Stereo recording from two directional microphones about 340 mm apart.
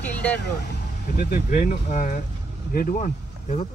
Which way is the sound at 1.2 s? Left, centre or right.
Left.